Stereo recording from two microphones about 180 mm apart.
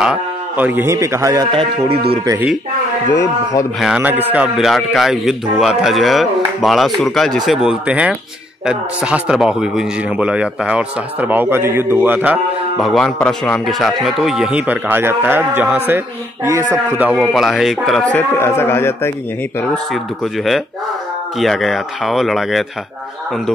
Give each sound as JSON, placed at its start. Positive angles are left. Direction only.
{"t": 0.0, "sound": "a man's voice", "side_deg": -5}
{"t": 2.2, "sound": "a man's voice", "side_deg": -10}
{"t": 3.1, "sound": "a man's voice", "side_deg": 15}
{"t": 3.8, "sound": "a man's voice", "side_deg": -5}
{"t": 21.4, "sound": "a man's voice", "side_deg": 0}